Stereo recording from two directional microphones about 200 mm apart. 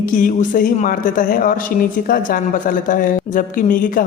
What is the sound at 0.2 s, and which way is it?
Speech, 45° left (ahead or behind).